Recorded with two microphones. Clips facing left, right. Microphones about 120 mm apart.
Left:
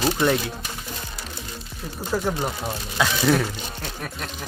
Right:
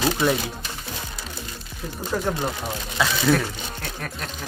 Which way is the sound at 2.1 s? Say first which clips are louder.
Left 1 dB; 5° left (ahead or behind).